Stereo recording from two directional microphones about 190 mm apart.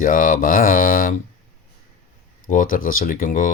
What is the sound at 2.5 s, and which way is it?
Speech, 45° left (ahead or behind).